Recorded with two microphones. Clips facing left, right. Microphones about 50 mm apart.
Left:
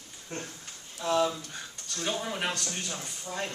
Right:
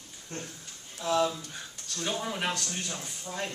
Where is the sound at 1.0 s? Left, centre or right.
Centre.